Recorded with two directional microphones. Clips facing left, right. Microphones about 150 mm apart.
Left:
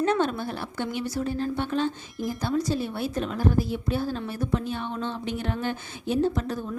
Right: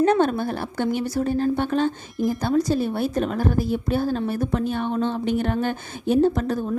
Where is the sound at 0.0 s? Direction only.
50° right (ahead or behind).